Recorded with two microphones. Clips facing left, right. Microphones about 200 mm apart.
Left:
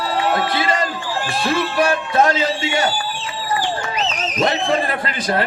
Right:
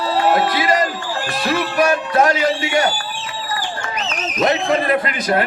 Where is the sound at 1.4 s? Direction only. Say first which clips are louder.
Right 1 dB; 30° left (ahead or behind).